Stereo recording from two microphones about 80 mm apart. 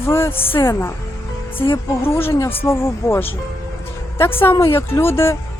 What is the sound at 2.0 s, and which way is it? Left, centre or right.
A woman's voice, left.